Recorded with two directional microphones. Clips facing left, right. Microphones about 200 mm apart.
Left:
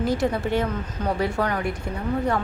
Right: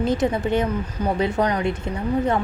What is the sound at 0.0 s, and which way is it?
A woman's voice, 20° right (ahead or behind).